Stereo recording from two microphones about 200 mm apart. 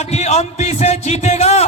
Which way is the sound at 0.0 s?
35° left (ahead or behind).